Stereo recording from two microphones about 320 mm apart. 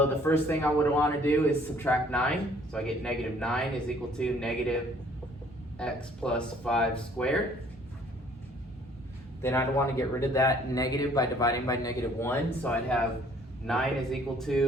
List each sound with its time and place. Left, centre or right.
0.0 s a man's voice: centre
5.8 s a man's voice: centre
9.4 s a man's voice: centre